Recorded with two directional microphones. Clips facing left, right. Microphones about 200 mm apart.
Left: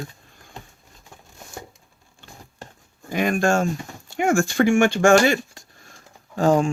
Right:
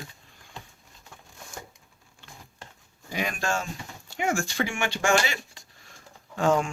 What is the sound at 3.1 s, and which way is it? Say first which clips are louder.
Speech: left 9 dB; 50° left (ahead or behind).